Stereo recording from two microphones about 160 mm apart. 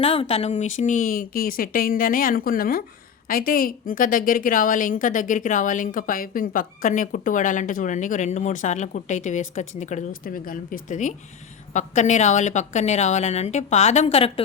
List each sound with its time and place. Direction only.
0.0 s a woman's voice: 35° left (ahead or behind)